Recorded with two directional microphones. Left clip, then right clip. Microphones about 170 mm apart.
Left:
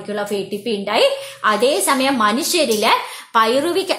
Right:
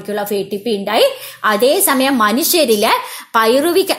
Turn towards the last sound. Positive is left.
turn(degrees=-45)  # may be behind; listen again after turning